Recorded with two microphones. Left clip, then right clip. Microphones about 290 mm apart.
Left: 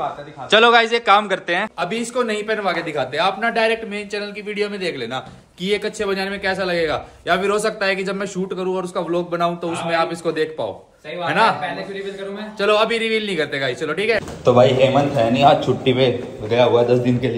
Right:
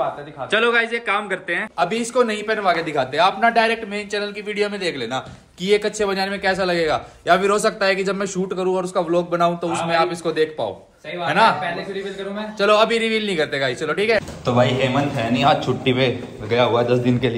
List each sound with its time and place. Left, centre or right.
0.5 s a man's voice: centre
12.5 s speech: centre
14.5 s a man's voice: centre
17.0 s a man's voice: centre